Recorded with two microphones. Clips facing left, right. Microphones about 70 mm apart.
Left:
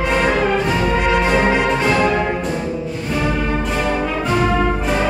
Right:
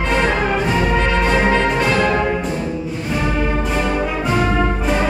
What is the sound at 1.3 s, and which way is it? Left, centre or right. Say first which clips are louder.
Music: right 1 dB; centre.